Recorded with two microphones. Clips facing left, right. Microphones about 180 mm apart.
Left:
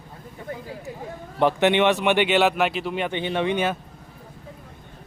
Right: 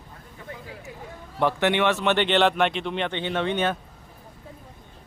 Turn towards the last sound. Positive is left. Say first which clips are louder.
# left 2 dB
turn(degrees=10)  # may be behind; listen again after turning